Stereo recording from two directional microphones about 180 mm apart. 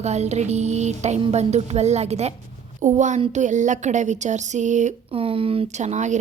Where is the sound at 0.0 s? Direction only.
40° right (ahead or behind).